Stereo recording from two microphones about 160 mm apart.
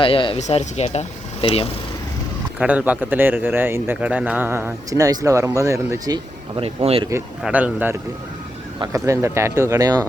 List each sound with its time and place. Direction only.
0.0 s speech: 30° left (ahead or behind)
0.3 s speech: 45° left (ahead or behind)
2.6 s speech: 10° right (ahead or behind)
6.6 s speech: 35° right (ahead or behind)
7.4 s speech: 10° right (ahead or behind)